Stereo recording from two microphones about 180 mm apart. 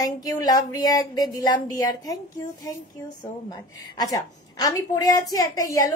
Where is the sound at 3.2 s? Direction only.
20° left (ahead or behind).